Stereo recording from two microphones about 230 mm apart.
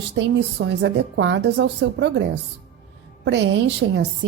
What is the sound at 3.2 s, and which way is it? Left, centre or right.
Speech, right.